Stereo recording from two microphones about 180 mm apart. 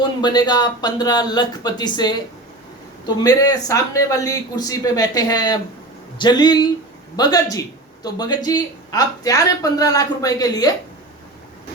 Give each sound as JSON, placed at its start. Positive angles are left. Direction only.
{"t": 0.2, "sound": "speech", "side_deg": 25}